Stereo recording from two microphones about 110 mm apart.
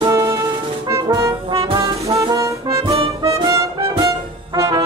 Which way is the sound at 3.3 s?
30° right (ahead or behind).